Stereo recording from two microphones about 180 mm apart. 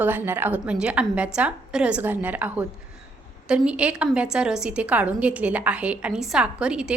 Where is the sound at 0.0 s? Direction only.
10° right (ahead or behind).